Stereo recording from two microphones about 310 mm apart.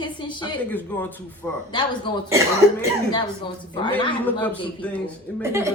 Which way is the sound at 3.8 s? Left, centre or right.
Centre.